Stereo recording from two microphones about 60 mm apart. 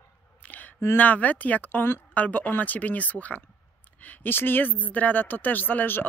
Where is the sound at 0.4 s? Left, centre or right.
Left.